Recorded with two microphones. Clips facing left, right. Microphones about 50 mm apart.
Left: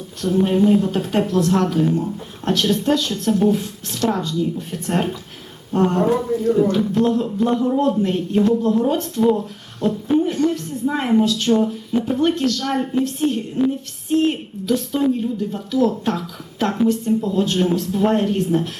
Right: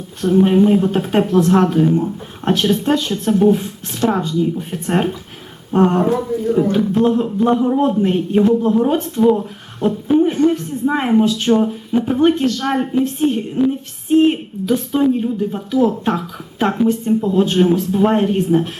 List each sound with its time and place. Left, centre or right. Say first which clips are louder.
0.4 s a woman's voice: right 1 dB; right